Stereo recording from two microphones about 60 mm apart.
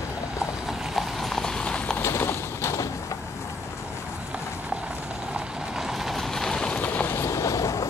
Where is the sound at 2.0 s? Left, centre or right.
Left.